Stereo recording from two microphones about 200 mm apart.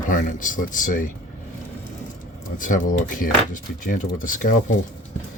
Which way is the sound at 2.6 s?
40° left (ahead or behind).